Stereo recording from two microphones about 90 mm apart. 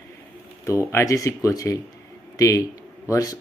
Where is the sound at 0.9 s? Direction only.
40° left (ahead or behind).